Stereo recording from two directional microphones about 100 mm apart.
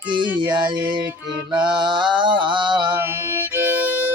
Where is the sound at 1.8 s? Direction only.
50° right (ahead or behind).